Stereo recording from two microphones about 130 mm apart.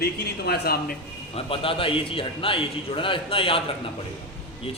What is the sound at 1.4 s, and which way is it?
A man's voice, 45° left (ahead or behind).